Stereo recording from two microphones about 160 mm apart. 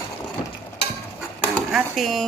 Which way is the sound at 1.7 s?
Centre (ahead or behind).